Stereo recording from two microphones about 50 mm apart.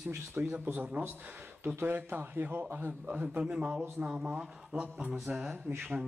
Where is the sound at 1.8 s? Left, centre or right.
Right.